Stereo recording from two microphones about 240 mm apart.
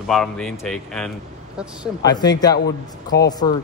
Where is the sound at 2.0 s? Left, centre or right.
Centre.